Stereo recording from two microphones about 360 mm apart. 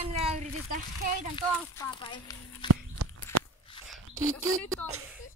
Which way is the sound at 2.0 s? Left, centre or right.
Centre.